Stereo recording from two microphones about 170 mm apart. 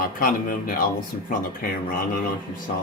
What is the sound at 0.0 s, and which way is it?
Speech, 55° left (ahead or behind).